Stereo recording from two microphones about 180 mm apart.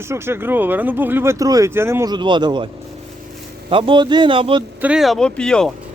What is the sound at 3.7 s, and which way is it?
Speech, 30° right (ahead or behind).